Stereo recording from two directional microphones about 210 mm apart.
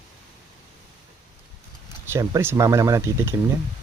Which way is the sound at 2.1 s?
15° right (ahead or behind).